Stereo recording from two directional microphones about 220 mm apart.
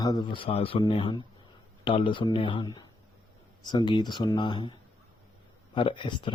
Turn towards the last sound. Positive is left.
turn(degrees=20)  # may be behind; listen again after turning